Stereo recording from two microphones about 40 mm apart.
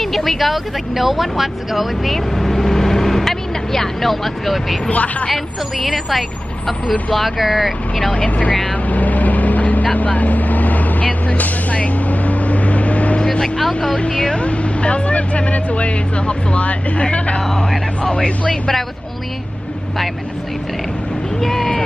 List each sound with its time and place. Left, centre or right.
0.0 s speech: centre
2.3 s vehicle: centre
4.9 s speech: left
5.3 s speech: centre
7.2 s speech: centre
8.1 s speech: left
8.8 s vehicle: left
13.2 s vehicle: left
13.9 s speech: left
14.4 s speech: left
18.5 s speech: centre
21.4 s vehicle: centre